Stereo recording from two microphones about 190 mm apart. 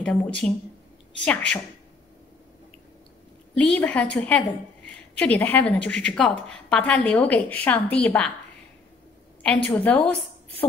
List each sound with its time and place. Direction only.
0.0 s speech: 5° left (ahead or behind)
3.5 s a woman's voice: 5° left (ahead or behind)
9.7 s a woman's voice: 5° left (ahead or behind)